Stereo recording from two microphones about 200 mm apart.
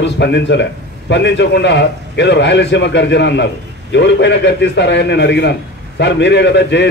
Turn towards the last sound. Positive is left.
turn(degrees=60)  # may be behind; listen again after turning